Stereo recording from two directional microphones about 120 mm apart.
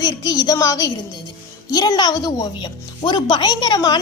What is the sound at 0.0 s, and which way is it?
Speech, 30° left (ahead or behind).